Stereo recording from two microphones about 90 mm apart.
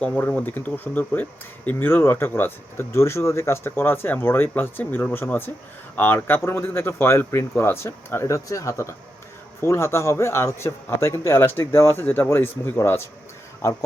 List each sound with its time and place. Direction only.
0.0 s speech: 20° left (ahead or behind)